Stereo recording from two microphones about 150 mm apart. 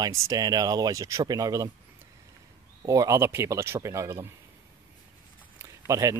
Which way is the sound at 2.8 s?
25° right (ahead or behind).